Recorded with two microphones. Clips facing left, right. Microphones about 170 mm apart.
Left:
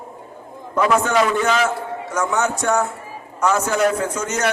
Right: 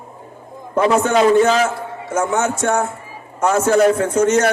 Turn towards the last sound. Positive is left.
turn(degrees=-30)  # may be behind; listen again after turning